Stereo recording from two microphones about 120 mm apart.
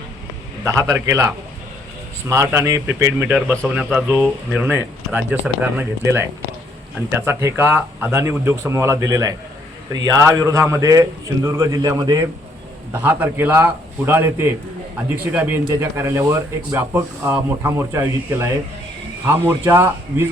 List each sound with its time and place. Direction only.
0.7 s speech: 25° right (ahead or behind)
12.9 s speech: 15° right (ahead or behind)